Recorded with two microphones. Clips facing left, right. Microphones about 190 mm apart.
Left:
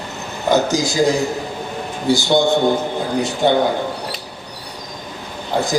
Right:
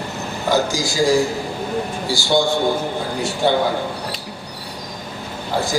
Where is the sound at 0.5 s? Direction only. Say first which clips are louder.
Left 4 dB; 20° left (ahead or behind).